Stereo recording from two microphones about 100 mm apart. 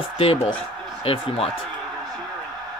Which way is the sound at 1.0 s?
65° left (ahead or behind).